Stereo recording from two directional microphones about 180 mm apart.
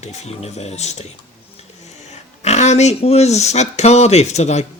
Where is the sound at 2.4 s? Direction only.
40° left (ahead or behind).